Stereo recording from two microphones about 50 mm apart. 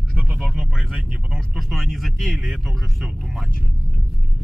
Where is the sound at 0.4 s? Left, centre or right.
Centre.